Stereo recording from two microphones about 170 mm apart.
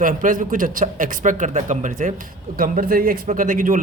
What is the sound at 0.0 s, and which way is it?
Speech, 50° right (ahead or behind).